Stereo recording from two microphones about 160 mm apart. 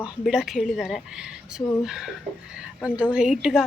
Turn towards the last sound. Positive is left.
turn(degrees=-5)  # may be behind; listen again after turning